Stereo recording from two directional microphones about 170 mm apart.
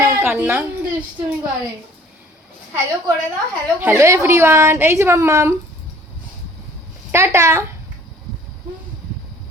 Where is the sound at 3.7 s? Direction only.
10° right (ahead or behind).